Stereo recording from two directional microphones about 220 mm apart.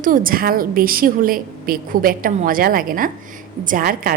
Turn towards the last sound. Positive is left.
turn(degrees=-40)  # may be behind; listen again after turning